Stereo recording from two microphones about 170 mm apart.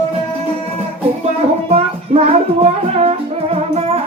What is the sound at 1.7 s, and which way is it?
Music, 35° right (ahead or behind).